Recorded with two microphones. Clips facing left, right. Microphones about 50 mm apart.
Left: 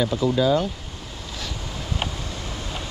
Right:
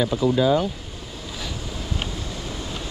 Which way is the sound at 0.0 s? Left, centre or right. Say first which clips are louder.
Right 1 dB; centre.